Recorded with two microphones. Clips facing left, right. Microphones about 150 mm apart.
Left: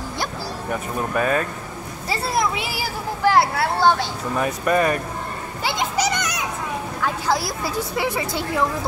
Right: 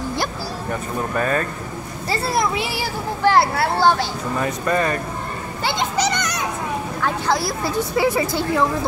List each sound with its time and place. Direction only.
1.1 s speech: 10° left (ahead or behind)
4.4 s speech: 15° left (ahead or behind)
5.6 s children playing: 5° left (ahead or behind)
7.0 s speech: 5° left (ahead or behind)